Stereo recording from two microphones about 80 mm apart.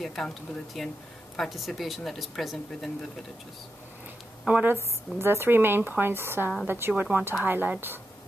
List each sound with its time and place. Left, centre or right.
0.0 s speech: centre
4.5 s a woman's voice: centre
5.2 s speech: right